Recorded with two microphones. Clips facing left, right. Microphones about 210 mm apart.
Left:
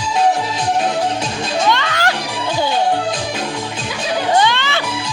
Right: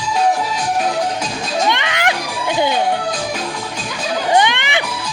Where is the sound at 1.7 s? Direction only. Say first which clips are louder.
Left 1 dB; 15° right (ahead or behind).